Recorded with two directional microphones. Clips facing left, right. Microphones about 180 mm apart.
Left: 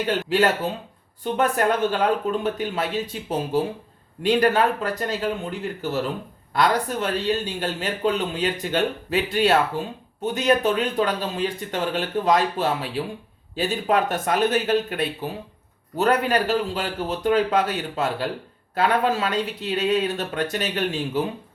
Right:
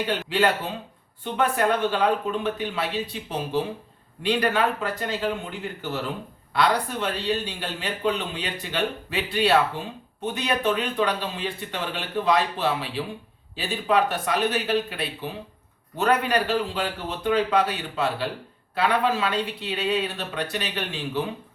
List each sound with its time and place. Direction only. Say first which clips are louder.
1.2 s a man's voice: left 2 dB; 45° left (ahead or behind)